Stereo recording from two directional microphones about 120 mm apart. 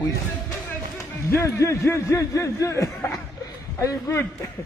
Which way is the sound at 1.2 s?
25° left (ahead or behind).